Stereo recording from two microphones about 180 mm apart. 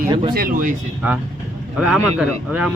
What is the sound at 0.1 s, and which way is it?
Speech, 25° right (ahead or behind).